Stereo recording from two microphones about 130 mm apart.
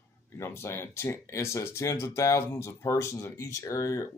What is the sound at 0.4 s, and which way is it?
Speech, 20° left (ahead or behind).